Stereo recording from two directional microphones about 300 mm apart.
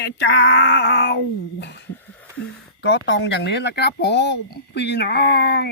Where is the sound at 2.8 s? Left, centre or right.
Left.